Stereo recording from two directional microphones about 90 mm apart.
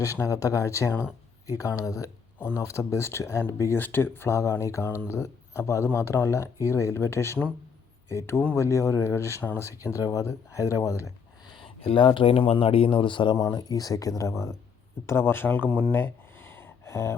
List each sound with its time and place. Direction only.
0.0 s speech: 35° left (ahead or behind)
11.6 s speech: 85° left; by 13.3 s 65° left (ahead or behind)
13.3 s speech: 35° left (ahead or behind)
15.9 s a sound: 25° left (ahead or behind)